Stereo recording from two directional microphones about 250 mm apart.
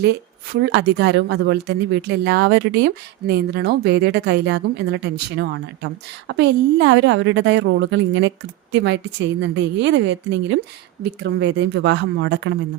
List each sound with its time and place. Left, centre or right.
0.0 s a woman's voice: right